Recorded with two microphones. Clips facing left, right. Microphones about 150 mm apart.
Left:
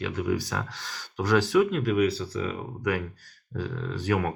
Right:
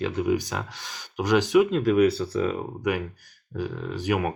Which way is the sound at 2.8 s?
15° right (ahead or behind).